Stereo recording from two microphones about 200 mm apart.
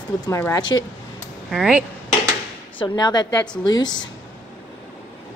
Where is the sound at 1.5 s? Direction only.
Centre (ahead or behind).